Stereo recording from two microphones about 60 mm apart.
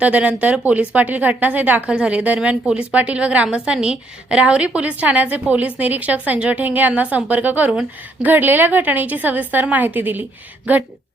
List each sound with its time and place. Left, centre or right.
0.0 s a woman's voice: right
1.9 s a woman's voice: centre